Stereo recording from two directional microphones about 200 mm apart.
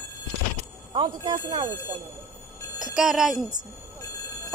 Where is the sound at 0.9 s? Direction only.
20° right (ahead or behind).